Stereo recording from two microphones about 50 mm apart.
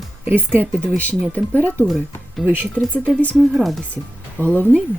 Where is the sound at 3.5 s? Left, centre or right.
Centre.